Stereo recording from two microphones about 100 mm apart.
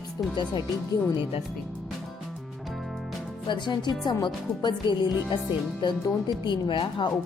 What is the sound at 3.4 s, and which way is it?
Speech, 50° left (ahead or behind).